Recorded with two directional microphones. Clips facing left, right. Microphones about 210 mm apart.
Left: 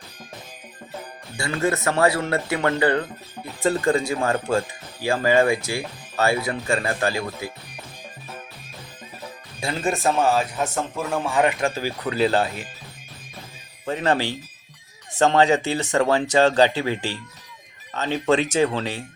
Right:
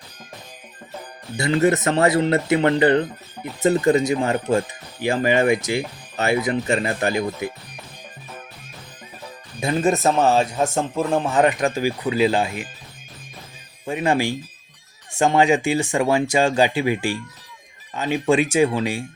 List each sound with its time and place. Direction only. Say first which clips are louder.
1.4 s speech: right 5 dB; 20° right (ahead or behind)
9.6 s speech: right 5 dB; 20° right (ahead or behind)
13.8 s speech: right 2 dB; 10° right (ahead or behind)